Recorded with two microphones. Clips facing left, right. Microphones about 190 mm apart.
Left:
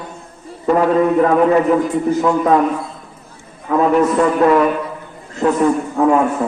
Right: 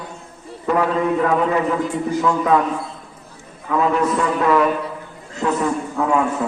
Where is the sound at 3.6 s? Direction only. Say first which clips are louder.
Left 5 dB; 40° left (ahead or behind).